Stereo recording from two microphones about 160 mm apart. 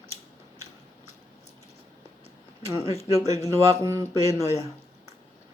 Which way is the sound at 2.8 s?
40° left (ahead or behind).